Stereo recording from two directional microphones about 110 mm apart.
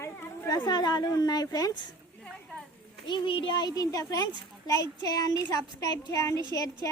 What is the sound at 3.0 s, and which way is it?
A child's voice, 50° left (ahead or behind).